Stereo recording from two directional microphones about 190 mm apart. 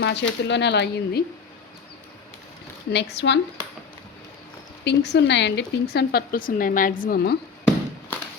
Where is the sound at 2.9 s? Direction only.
65° left (ahead or behind).